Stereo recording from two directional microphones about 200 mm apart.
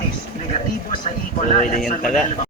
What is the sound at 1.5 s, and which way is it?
Speech, 40° left (ahead or behind).